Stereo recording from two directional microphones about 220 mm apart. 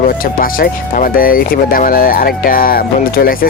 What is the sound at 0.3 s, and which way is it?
Speech, 40° left (ahead or behind).